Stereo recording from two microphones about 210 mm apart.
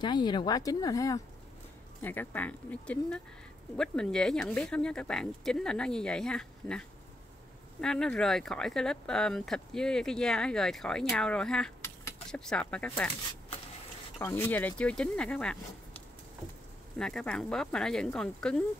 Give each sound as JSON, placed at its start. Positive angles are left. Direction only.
{"t": 0.0, "sound": "speech", "side_deg": 20}
{"t": 14.2, "sound": "speech", "side_deg": 10}
{"t": 17.0, "sound": "speech", "side_deg": 5}